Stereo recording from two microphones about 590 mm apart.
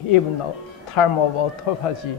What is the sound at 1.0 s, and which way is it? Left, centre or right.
Speech, left.